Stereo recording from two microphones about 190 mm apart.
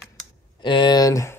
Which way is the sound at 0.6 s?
25° left (ahead or behind).